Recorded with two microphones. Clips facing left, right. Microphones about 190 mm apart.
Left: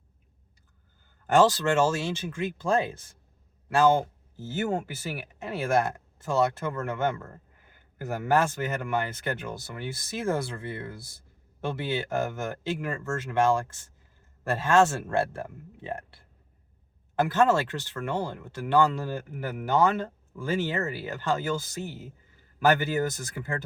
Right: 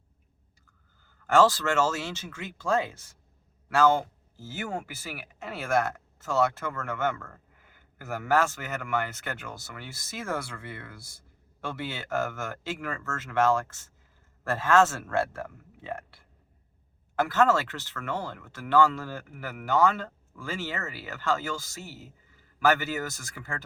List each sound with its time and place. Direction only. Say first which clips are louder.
1.3 s a man's voice: left 1 dB; 15° left (ahead or behind)
17.2 s speech: left 1 dB; 20° left (ahead or behind)